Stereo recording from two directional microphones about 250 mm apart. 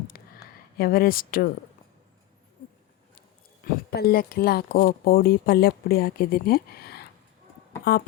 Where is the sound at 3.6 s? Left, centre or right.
Left.